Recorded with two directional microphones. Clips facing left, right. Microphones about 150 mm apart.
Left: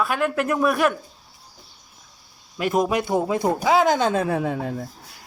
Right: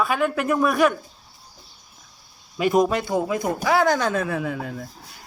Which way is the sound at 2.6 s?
Centre (ahead or behind).